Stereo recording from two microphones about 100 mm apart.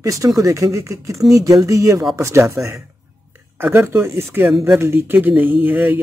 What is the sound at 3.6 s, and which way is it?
Speech, 20° right (ahead or behind).